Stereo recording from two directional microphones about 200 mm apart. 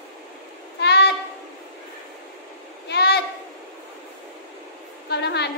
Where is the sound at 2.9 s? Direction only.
55° left (ahead or behind).